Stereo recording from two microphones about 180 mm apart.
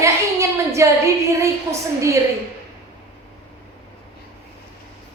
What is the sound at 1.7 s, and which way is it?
Speech, 20° right (ahead or behind).